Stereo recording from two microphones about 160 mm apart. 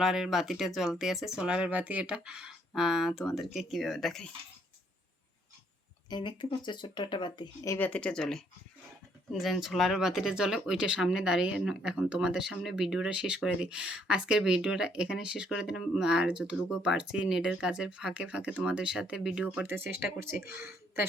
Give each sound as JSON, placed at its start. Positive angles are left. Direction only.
{"t": 0.0, "sound": "speech", "side_deg": -5}
{"t": 6.1, "sound": "speech", "side_deg": 25}
{"t": 7.8, "sound": "speech", "side_deg": 10}